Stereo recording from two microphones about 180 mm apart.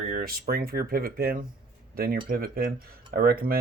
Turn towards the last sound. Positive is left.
turn(degrees=-55)  # may be behind; listen again after turning